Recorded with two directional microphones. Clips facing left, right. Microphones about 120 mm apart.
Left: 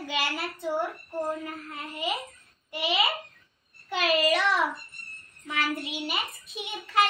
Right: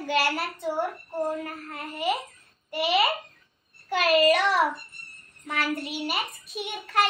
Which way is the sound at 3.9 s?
50° right (ahead or behind).